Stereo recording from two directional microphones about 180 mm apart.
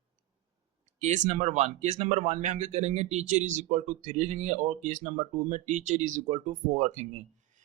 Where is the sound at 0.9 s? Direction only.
40° right (ahead or behind).